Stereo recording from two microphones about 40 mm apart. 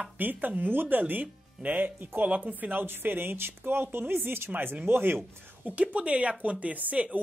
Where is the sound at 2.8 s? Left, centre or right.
Right.